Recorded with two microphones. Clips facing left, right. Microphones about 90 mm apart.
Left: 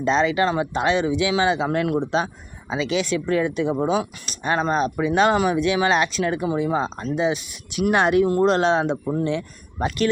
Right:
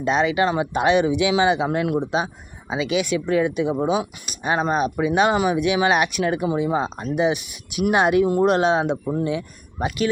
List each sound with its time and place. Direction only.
0.0 s speech: 15° right (ahead or behind)